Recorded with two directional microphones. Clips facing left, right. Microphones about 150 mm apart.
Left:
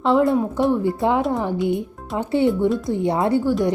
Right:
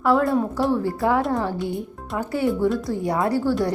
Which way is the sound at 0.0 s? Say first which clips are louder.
Left 2 dB; 20° left (ahead or behind).